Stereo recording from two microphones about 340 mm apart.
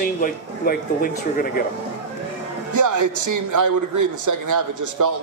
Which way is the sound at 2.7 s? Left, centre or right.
Right.